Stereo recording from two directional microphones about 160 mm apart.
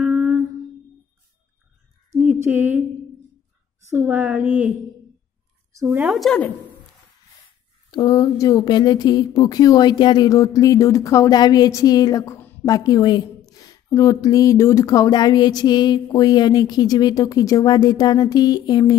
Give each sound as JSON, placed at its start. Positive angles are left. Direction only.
{"t": 0.0, "sound": "a sound", "side_deg": -10}
{"t": 2.1, "sound": "a sound", "side_deg": -10}
{"t": 3.9, "sound": "a woman's voice", "side_deg": -10}
{"t": 5.8, "sound": "a woman's voice", "side_deg": -15}
{"t": 6.1, "sound": "speech", "side_deg": 5}
{"t": 7.9, "sound": "a woman's voice", "side_deg": 25}